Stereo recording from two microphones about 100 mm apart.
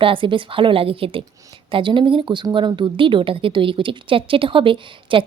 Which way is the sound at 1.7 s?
55° right (ahead or behind).